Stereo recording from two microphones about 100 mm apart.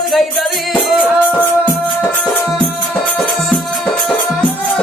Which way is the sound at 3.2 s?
Centre (ahead or behind).